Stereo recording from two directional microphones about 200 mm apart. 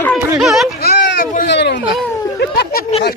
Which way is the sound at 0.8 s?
50° left (ahead or behind).